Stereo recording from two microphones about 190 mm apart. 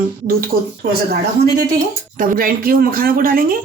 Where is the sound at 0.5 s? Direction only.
55° right (ahead or behind).